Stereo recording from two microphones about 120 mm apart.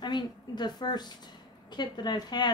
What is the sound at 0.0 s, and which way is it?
Speech, 35° left (ahead or behind).